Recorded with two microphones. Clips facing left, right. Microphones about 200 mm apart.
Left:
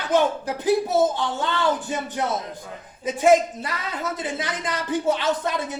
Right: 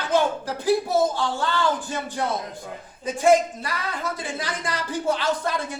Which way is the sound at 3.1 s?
20° left (ahead or behind).